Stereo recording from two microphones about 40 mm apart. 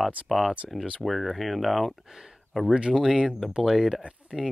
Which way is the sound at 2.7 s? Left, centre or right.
Right.